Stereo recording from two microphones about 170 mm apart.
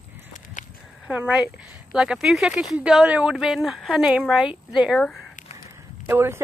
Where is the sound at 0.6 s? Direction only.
50° left (ahead or behind).